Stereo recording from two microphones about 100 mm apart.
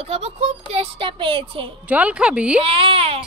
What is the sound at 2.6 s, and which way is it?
Speech, 60° right (ahead or behind).